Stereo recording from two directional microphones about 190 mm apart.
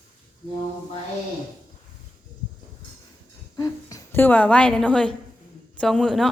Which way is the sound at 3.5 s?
15° left (ahead or behind).